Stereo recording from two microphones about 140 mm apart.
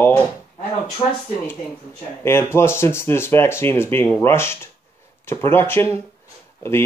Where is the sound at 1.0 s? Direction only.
45° left (ahead or behind).